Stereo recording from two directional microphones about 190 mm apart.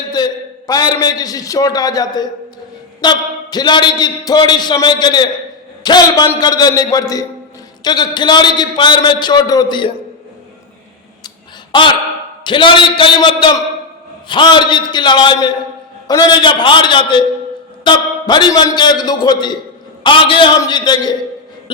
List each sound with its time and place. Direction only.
0.7 s a man's voice: 20° left (ahead or behind)
11.7 s a man's voice: 25° left (ahead or behind)